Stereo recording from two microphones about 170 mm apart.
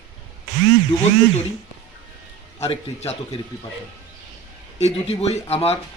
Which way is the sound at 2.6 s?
40° left (ahead or behind).